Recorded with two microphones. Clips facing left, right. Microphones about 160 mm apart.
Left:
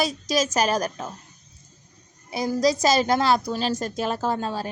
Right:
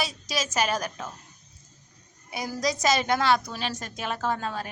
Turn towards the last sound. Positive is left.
turn(degrees=30)  # may be behind; listen again after turning